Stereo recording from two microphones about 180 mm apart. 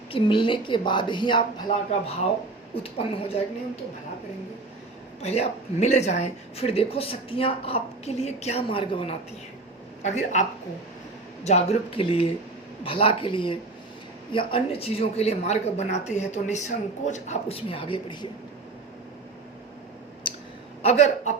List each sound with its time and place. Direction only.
0.1 s a woman's voice: 30° left (ahead or behind)
2.8 s speech: 30° left (ahead or behind)
5.2 s speech: 35° left (ahead or behind)
11.4 s a woman's voice: 35° left (ahead or behind)
20.2 s clicking: 25° left (ahead or behind)
20.8 s speech: 40° left (ahead or behind)